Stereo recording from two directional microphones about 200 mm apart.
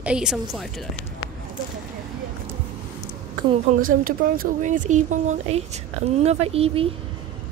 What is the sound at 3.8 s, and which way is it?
Speech, 45° right (ahead or behind).